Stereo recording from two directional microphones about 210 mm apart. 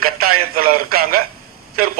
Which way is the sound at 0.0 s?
45° right (ahead or behind).